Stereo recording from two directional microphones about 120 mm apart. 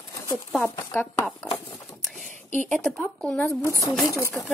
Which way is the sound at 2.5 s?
10° left (ahead or behind).